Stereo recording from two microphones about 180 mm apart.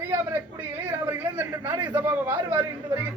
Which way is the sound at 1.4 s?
15° right (ahead or behind).